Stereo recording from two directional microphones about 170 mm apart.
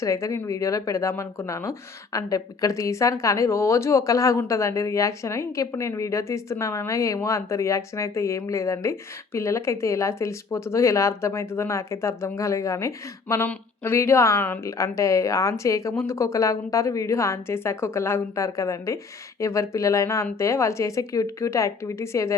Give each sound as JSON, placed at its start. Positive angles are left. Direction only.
{"t": 0.0, "sound": "a woman's voice", "side_deg": 20}